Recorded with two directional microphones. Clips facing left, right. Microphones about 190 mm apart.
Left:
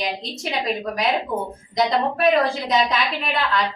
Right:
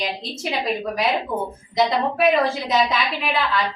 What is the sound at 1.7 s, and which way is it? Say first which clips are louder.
A woman's voice: even; centre (ahead or behind).